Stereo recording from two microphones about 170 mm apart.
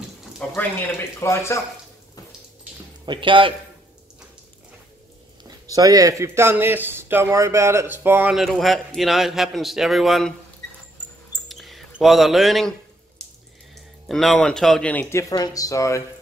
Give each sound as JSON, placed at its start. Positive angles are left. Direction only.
{"t": 0.4, "sound": "speech", "side_deg": 10}
{"t": 3.1, "sound": "speech", "side_deg": -30}
{"t": 5.7, "sound": "speech", "side_deg": -20}
{"t": 11.4, "sound": "mouse", "side_deg": 0}
{"t": 13.2, "sound": "water", "side_deg": 5}
{"t": 14.0, "sound": "speech", "side_deg": 5}